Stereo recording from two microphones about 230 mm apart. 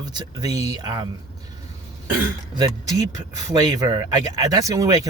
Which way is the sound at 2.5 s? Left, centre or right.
Centre.